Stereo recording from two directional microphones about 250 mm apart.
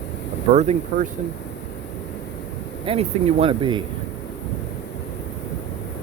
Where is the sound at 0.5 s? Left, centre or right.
Right.